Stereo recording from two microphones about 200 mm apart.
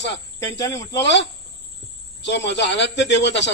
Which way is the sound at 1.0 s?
60° left (ahead or behind).